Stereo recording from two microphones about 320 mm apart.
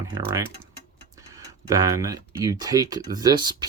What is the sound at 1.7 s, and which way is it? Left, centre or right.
Speech, centre.